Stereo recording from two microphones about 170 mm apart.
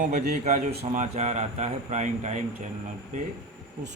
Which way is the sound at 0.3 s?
45° right (ahead or behind).